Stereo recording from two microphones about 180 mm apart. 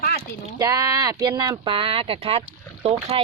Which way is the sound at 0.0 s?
60° left (ahead or behind).